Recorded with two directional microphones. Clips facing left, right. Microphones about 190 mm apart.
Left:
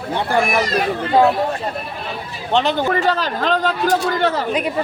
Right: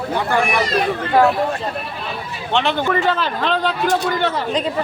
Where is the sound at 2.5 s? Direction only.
40° left (ahead or behind).